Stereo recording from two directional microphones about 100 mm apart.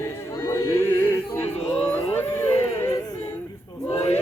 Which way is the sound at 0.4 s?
25° left (ahead or behind).